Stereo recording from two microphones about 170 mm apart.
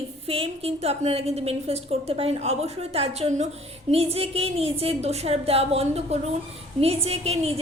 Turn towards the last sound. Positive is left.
turn(degrees=-35)  # may be behind; listen again after turning